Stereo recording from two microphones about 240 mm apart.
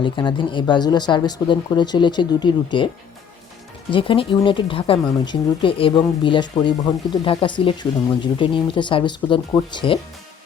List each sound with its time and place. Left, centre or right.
0.0 s speech: centre
3.9 s speech: left